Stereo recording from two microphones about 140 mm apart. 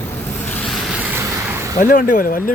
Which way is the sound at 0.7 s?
Centre (ahead or behind).